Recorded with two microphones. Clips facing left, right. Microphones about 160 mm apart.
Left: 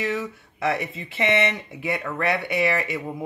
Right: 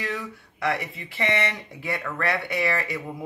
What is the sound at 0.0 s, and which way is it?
Speech, 20° left (ahead or behind).